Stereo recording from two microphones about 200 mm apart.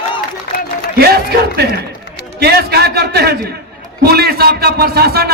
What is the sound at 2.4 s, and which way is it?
A man's voice, 50° right (ahead or behind).